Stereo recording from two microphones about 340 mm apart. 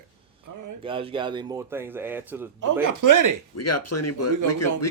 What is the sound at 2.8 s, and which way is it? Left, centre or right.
Speech, right.